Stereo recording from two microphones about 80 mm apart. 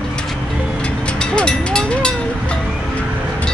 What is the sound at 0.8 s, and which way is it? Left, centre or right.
Mechanisms, centre.